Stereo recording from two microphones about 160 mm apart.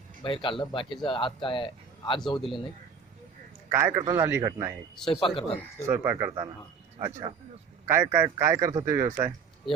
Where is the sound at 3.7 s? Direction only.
15° right (ahead or behind).